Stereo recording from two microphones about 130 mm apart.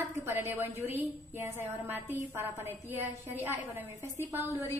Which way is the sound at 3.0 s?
15° right (ahead or behind).